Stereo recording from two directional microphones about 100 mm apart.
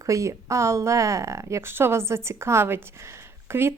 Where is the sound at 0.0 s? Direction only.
30° right (ahead or behind).